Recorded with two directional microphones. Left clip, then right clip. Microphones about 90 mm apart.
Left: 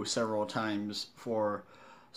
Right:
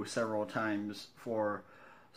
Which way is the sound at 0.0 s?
15° left (ahead or behind).